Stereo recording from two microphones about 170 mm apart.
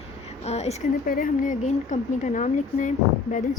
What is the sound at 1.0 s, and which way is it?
Speech, 55° left (ahead or behind).